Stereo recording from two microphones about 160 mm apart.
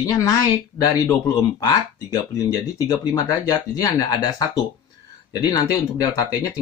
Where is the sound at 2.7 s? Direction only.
20° left (ahead or behind).